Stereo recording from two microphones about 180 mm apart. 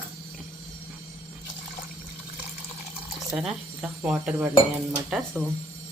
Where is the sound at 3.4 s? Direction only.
5° right (ahead or behind).